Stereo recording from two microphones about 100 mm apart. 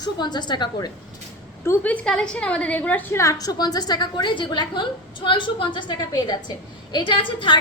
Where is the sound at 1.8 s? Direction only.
15° left (ahead or behind).